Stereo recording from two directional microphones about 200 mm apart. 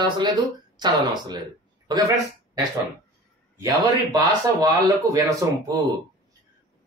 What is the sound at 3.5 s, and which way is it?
Speech, 15° right (ahead or behind).